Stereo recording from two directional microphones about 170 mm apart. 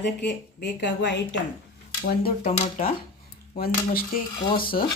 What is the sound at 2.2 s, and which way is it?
Speech, 55° left (ahead or behind).